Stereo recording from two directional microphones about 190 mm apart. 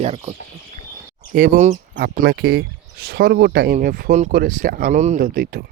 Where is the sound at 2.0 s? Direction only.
55° right (ahead or behind).